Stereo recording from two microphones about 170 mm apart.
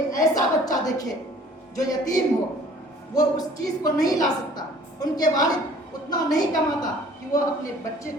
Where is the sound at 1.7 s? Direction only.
20° left (ahead or behind).